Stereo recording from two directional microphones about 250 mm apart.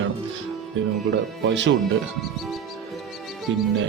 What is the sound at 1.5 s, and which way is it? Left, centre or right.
Speech, right.